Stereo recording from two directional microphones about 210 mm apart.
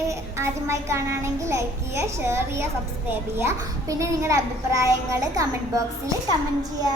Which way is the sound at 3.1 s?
10° right (ahead or behind).